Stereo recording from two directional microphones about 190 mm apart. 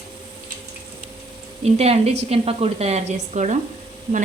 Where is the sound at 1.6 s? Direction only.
30° right (ahead or behind).